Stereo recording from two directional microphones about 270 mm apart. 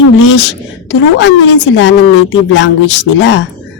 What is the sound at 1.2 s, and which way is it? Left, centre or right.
A woman's voice, left.